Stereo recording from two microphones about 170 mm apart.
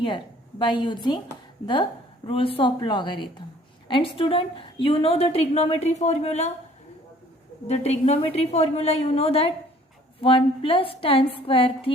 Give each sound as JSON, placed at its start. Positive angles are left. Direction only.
{"t": 0.6, "sound": "a woman's voice", "side_deg": 25}
{"t": 7.7, "sound": "a woman's voice", "side_deg": 40}